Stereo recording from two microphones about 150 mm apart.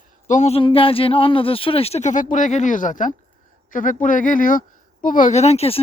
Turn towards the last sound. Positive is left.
turn(degrees=40)  # may be behind; listen again after turning